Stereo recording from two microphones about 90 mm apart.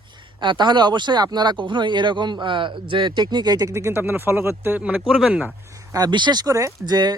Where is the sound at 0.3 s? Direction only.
55° right (ahead or behind); by 4.9 s 20° right (ahead or behind).